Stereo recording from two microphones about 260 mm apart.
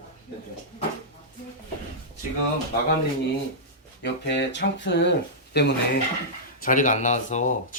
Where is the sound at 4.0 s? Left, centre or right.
Left.